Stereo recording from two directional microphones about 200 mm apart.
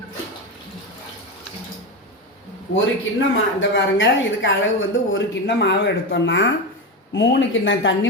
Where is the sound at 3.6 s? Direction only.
65° left (ahead or behind).